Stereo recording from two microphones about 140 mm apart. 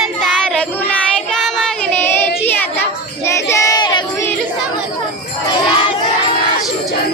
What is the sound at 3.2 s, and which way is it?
Battle cry, 20° left (ahead or behind).